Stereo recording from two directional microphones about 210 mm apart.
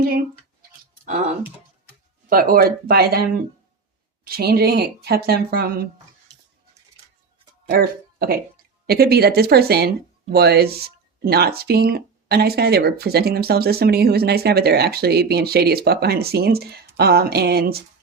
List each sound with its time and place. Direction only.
1.0 s speech: 40° right (ahead or behind)
2.3 s speech: 45° right (ahead or behind)
7.7 s speech: 45° right (ahead or behind)